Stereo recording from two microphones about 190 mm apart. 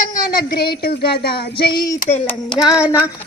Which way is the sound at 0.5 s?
55° left (ahead or behind).